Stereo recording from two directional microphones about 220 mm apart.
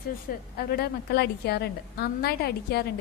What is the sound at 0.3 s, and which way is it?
A woman's voice, 45° left (ahead or behind).